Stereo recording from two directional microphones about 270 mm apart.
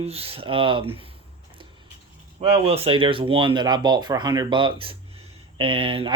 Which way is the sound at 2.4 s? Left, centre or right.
Right.